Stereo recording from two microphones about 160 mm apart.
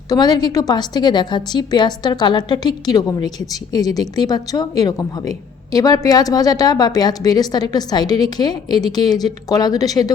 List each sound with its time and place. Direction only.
0.1 s a woman's voice: 25° left (ahead or behind)